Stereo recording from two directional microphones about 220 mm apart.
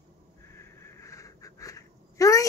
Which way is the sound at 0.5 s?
10° left (ahead or behind).